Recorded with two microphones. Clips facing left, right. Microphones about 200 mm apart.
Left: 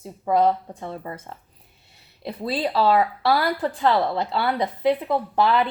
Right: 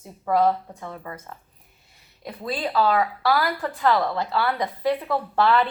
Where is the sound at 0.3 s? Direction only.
20° left (ahead or behind).